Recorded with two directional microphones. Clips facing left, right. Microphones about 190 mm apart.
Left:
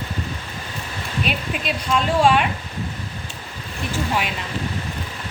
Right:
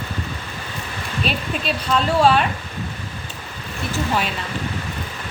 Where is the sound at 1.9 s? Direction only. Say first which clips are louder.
Right 1 dB; 10° left (ahead or behind).